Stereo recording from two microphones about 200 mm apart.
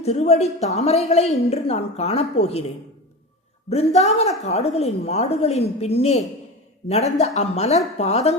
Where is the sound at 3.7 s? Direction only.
30° left (ahead or behind).